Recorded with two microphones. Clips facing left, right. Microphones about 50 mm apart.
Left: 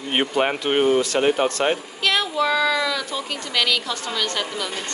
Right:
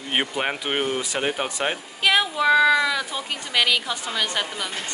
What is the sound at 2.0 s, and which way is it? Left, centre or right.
Child singing, centre.